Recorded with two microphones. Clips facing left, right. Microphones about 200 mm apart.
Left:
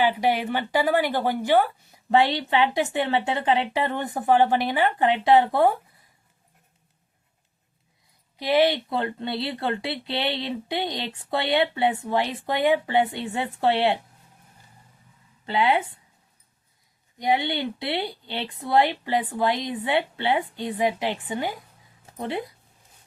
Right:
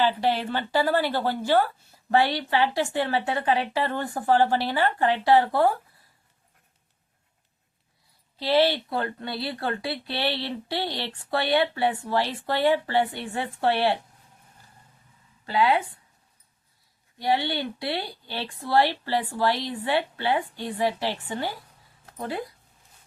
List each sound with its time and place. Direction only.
0.0 s a woman's voice: 15° left (ahead or behind)
8.4 s a woman's voice: 15° left (ahead or behind)
15.4 s a woman's voice: 25° left (ahead or behind)
17.2 s a woman's voice: 20° left (ahead or behind)